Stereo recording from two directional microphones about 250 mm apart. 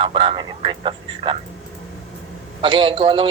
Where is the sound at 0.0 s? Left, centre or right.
Centre.